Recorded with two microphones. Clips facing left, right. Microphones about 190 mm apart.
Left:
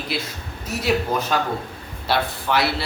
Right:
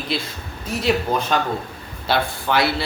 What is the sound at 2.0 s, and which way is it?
Speech, centre (ahead or behind).